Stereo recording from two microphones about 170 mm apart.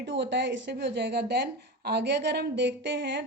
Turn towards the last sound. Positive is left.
turn(degrees=-90)